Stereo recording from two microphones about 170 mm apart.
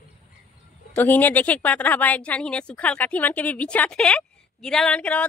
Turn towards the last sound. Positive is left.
turn(degrees=5)  # may be behind; listen again after turning